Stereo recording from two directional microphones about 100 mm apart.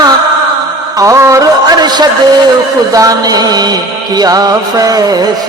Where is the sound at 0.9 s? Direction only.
30° right (ahead or behind).